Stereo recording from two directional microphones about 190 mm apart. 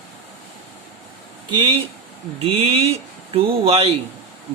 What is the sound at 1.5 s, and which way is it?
Speech, 25° right (ahead or behind).